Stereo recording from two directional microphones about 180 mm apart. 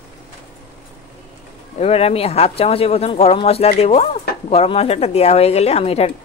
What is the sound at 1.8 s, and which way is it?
Speech, 35° left (ahead or behind).